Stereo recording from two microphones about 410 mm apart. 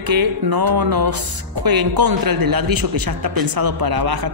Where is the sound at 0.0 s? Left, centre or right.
Right.